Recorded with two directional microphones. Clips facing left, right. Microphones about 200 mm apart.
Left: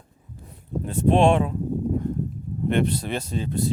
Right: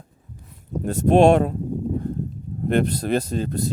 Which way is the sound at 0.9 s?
45° right (ahead or behind).